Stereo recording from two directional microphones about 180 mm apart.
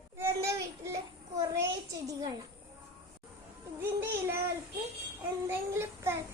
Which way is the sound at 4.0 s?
15° right (ahead or behind).